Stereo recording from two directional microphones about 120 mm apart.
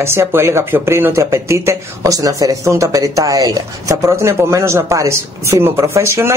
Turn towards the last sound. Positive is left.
turn(degrees=-20)  # may be behind; listen again after turning